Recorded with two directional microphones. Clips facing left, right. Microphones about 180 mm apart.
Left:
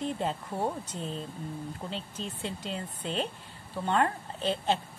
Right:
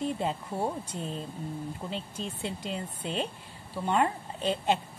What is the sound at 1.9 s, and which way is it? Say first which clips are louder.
A woman's voice: right 1 dB; 10° right (ahead or behind).